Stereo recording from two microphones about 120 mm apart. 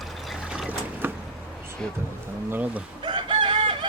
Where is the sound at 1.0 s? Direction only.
15° right (ahead or behind).